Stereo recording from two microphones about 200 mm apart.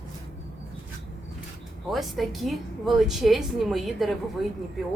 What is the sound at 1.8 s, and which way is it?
A woman's voice, centre (ahead or behind).